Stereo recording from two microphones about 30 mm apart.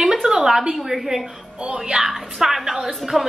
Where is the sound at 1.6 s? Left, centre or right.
Right.